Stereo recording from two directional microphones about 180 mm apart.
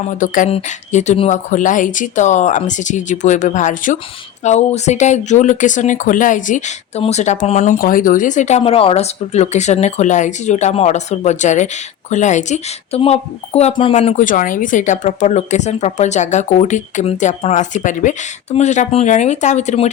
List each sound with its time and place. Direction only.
0.2 s speech: 45° left (ahead or behind)